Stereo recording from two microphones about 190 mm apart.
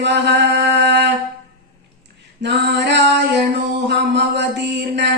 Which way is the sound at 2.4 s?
65° right (ahead or behind).